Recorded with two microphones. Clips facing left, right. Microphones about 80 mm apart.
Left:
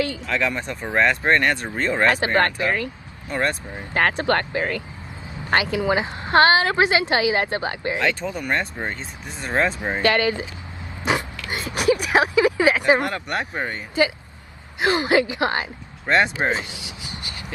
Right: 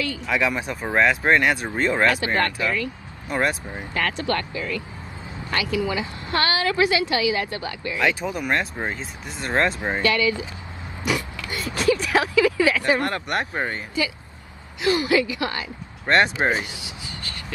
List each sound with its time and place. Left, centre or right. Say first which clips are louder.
0.3 s speech: right 1 dB; centre
2.0 s a woman's voice: left 2 dB; left
3.3 s speech: even; centre
3.9 s a woman's voice: left 5 dB; left
5.5 s a woman's voice: left 4 dB; left
8.0 s speech: right 4 dB; centre
10.0 s a woman's voice: left 2 dB; left
11.1 s speech: left 2 dB; left
13.5 s speech: right 1 dB; centre
14.9 s speech: left 1 dB; left
16.3 s speech: right 1 dB; right